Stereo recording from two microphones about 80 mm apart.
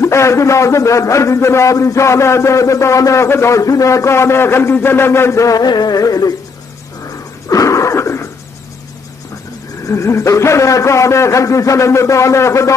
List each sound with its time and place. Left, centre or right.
0.0 s a man's voice: left
7.4 s cough: left
9.8 s a man's voice: left